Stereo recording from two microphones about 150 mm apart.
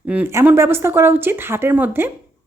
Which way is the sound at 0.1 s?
10° right (ahead or behind).